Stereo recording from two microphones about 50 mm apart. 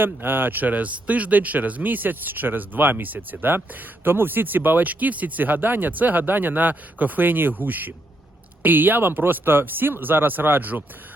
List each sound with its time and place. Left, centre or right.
0.0 s speech: right